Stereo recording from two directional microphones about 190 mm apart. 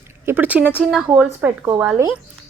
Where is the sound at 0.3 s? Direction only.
10° right (ahead or behind).